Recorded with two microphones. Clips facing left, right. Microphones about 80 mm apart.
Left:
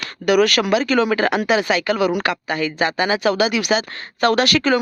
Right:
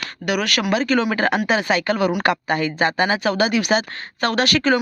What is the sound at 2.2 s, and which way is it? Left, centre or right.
Speech, right.